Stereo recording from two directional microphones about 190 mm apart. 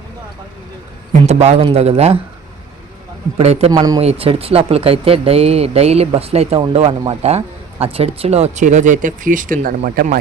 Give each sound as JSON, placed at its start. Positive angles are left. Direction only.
{"t": 1.3, "sound": "speech", "side_deg": -35}
{"t": 3.3, "sound": "speech", "side_deg": -35}
{"t": 3.7, "sound": "speech", "side_deg": -20}
{"t": 4.0, "sound": "speech", "side_deg": -30}